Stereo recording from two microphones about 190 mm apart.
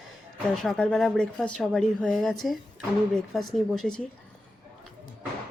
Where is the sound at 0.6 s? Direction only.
5° left (ahead or behind).